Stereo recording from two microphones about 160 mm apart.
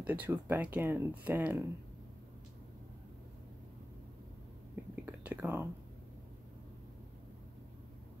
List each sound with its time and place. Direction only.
0.0 s speech: 10° right (ahead or behind)
5.0 s whispering: 10° right (ahead or behind)